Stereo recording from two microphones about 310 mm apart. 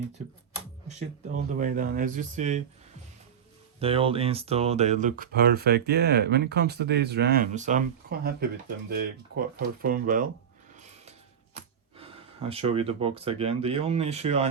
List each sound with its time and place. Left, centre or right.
1.5 s speech: right
3.8 s speech: centre
10.8 s a sound: right
11.5 s speech: centre